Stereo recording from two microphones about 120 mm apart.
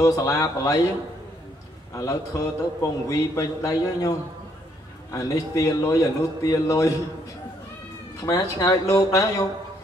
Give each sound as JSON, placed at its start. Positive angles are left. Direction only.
{"t": 0.0, "sound": "a man's voice", "side_deg": 30}
{"t": 2.0, "sound": "a man's voice", "side_deg": 25}
{"t": 8.2, "sound": "a man's voice", "side_deg": 30}